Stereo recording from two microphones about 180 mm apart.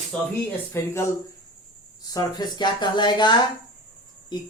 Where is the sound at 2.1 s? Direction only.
25° left (ahead or behind).